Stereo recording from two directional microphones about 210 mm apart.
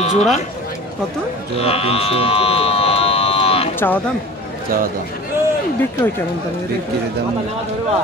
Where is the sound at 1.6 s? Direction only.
30° left (ahead or behind).